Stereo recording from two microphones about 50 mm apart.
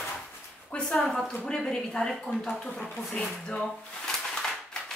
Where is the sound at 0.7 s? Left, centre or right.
Left.